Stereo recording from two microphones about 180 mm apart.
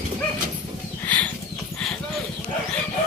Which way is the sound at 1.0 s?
10° left (ahead or behind).